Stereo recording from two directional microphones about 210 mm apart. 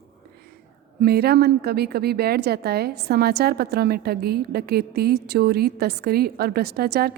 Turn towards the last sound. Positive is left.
turn(degrees=-50)  # may be behind; listen again after turning